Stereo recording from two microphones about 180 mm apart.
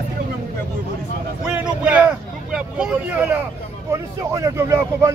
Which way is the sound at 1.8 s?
5° right (ahead or behind).